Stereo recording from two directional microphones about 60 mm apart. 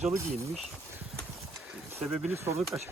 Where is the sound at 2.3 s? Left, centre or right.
Right.